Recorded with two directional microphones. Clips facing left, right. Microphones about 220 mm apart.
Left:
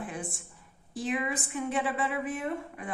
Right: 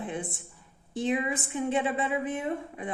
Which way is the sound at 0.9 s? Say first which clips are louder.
Right 3 dB; 25° right (ahead or behind).